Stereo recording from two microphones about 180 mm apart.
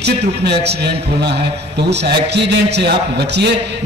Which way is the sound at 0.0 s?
65° right (ahead or behind).